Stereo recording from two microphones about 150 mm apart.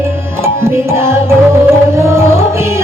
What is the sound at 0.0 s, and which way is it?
Music, 15° right (ahead or behind).